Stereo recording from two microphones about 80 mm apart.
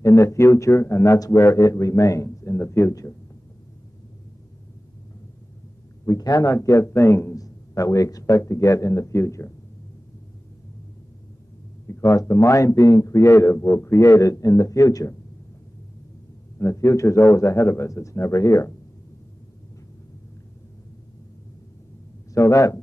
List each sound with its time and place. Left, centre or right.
0.0 s a man's voice: left
6.0 s a man's voice: left
7.3 s a man's voice: left
11.9 s a man's voice: left
16.5 s a man's voice: left
22.3 s a man's voice: left